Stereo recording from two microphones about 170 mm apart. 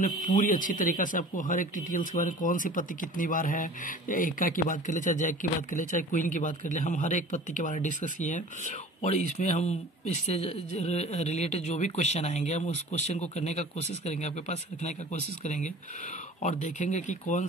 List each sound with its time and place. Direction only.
0.3 s a man's voice: 50° left (ahead or behind)